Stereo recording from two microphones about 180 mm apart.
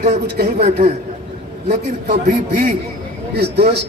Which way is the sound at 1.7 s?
55° right (ahead or behind).